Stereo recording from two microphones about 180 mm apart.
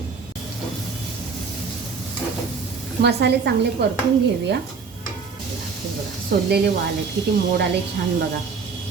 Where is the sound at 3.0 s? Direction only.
65° right (ahead or behind).